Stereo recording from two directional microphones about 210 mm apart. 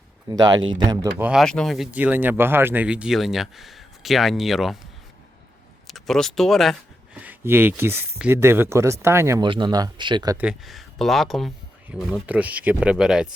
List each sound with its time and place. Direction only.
0.3 s speech: 20° right (ahead or behind)
1.2 s speech: centre (ahead or behind)
5.9 s speech: centre (ahead or behind); by 10.3 s 20° right (ahead or behind)
10.3 s speech: 5° right (ahead or behind)